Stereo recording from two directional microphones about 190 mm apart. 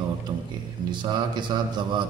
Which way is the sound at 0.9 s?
25° right (ahead or behind).